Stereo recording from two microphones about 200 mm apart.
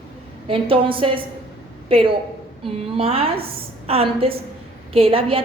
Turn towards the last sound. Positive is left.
turn(degrees=-25)  # may be behind; listen again after turning